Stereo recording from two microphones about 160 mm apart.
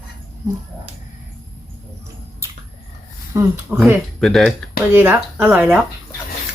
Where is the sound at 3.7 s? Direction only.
5° right (ahead or behind).